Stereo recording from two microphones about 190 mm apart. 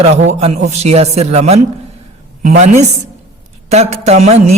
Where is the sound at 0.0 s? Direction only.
35° right (ahead or behind).